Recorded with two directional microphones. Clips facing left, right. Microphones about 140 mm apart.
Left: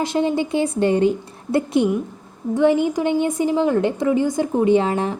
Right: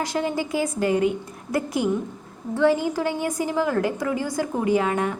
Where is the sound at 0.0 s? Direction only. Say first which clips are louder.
Left 5 dB; 25° left (ahead or behind).